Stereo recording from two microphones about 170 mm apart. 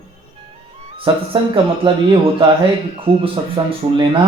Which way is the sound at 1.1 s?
25° right (ahead or behind).